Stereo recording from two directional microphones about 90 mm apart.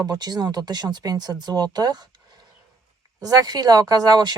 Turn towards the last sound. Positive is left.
turn(degrees=-50)  # may be behind; listen again after turning